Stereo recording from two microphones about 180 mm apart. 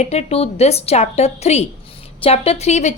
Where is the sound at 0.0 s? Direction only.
35° left (ahead or behind).